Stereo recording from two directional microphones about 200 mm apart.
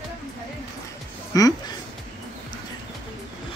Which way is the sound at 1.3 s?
15° left (ahead or behind).